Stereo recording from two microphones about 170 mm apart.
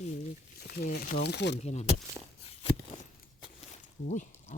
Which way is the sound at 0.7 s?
65° left (ahead or behind).